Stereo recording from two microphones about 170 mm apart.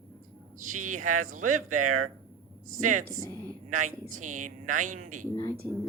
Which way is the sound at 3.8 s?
45° right (ahead or behind).